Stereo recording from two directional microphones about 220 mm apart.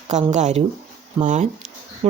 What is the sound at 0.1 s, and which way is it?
Speech, 30° right (ahead or behind).